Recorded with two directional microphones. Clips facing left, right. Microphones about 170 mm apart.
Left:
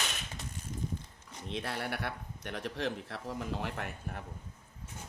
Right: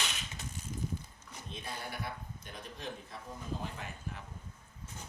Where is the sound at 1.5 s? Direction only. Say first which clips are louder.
Left 7 dB; 75° left (ahead or behind).